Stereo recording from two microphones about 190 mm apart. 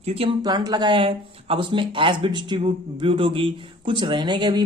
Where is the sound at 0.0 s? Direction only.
30° right (ahead or behind).